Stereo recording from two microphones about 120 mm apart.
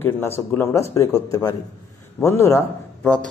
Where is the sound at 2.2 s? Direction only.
20° left (ahead or behind).